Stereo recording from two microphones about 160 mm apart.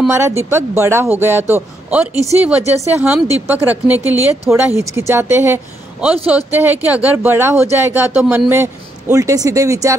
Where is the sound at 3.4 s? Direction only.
10° right (ahead or behind).